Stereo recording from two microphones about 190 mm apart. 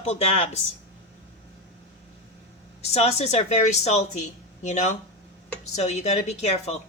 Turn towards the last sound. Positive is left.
turn(degrees=35)  # may be behind; listen again after turning